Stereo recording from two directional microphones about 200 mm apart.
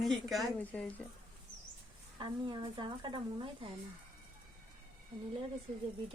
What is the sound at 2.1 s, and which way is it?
Speech, 25° right (ahead or behind).